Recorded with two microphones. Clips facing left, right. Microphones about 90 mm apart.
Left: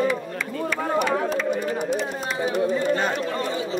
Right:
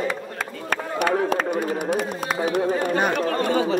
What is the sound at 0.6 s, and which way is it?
Run, 50° right (ahead or behind).